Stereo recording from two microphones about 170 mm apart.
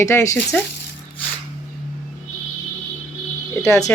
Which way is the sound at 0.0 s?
15° left (ahead or behind).